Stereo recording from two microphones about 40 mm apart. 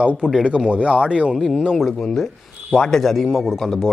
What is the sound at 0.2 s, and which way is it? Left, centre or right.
Speech, right.